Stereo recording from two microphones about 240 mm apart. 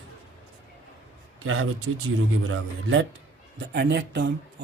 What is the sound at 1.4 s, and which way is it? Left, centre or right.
Speech, right.